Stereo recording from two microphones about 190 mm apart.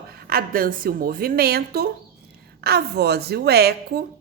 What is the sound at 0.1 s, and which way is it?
A woman's voice, 50° right (ahead or behind).